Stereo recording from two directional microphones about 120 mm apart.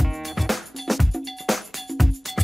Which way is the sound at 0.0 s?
Centre (ahead or behind).